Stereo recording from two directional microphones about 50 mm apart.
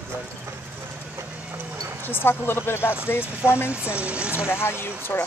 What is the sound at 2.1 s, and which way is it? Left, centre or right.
Speech, left.